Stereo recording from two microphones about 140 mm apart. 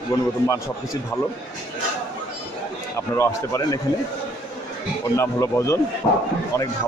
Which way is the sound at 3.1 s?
20° left (ahead or behind).